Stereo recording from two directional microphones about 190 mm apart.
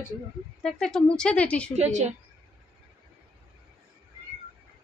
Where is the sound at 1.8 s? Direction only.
35° right (ahead or behind).